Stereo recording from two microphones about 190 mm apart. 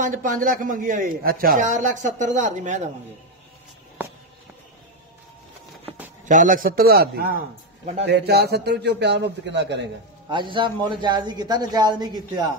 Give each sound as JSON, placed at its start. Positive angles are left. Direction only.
{"t": 0.0, "sound": "a woman's voice", "side_deg": -45}
{"t": 6.2, "sound": "a man's voice", "side_deg": -45}
{"t": 10.3, "sound": "a man's voice", "side_deg": -25}